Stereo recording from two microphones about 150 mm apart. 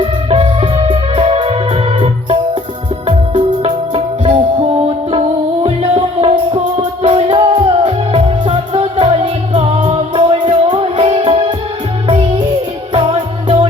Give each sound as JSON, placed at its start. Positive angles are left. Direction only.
{"t": 0.0, "sound": "music", "side_deg": -40}
{"t": 3.1, "sound": "music", "side_deg": -35}
{"t": 5.6, "sound": "music", "side_deg": -40}
{"t": 9.7, "sound": "music", "side_deg": -45}
{"t": 12.9, "sound": "music", "side_deg": -35}